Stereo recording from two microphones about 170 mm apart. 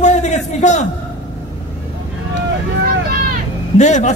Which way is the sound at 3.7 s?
45° left (ahead or behind).